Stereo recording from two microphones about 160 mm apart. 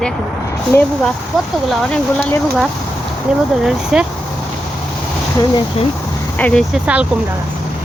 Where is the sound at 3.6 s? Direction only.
5° right (ahead or behind).